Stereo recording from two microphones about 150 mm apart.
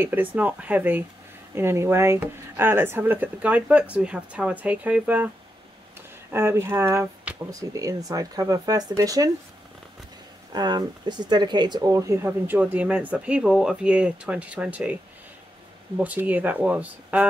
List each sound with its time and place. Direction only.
0.0 s speech: 10° right (ahead or behind)
6.3 s speech: 15° right (ahead or behind)
10.5 s speech: 30° right (ahead or behind); by 15.0 s 10° right (ahead or behind)
16.0 s speech: 10° right (ahead or behind)